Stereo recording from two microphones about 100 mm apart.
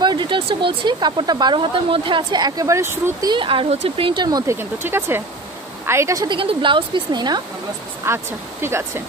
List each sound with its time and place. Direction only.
0.0 s speech: 50° right (ahead or behind); by 3.3 s 35° right (ahead or behind)
3.3 s speech: 60° right (ahead or behind)
4.5 s speech: 25° right (ahead or behind)
6.2 s speech: 55° right (ahead or behind)
8.0 s speech: 25° right (ahead or behind)